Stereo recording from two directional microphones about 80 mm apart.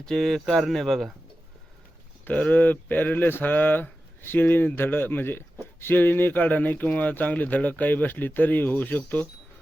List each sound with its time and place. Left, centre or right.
0.0 s speech: centre
2.2 s speech: left